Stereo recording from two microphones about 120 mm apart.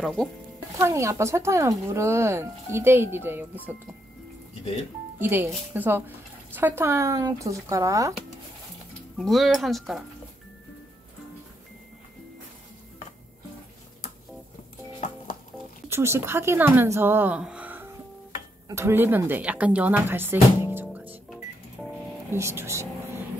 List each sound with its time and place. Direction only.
0.0 s speech: centre (ahead or behind)
0.7 s speech: 25° right (ahead or behind)
5.2 s speech: 15° right (ahead or behind)
9.2 s speech: centre (ahead or behind)
15.9 s speech: 20° right (ahead or behind)
17.4 s music: 10° right (ahead or behind)
18.7 s speech: 20° right (ahead or behind)
21.8 s music: centre (ahead or behind)
22.3 s speech: 20° right (ahead or behind)